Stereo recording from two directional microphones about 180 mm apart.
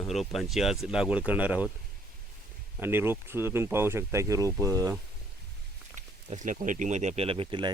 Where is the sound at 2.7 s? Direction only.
10° right (ahead or behind).